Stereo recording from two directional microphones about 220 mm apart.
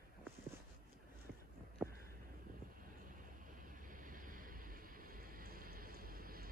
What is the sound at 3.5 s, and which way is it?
Vehicle, 40° right (ahead or behind).